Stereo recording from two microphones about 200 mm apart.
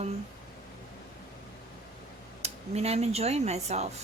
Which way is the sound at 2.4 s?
30° right (ahead or behind).